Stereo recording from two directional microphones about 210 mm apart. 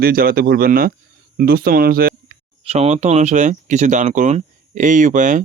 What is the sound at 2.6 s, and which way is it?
Speech, 30° right (ahead or behind).